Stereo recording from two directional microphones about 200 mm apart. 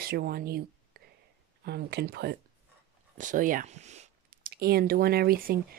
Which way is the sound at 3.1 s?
40° right (ahead or behind).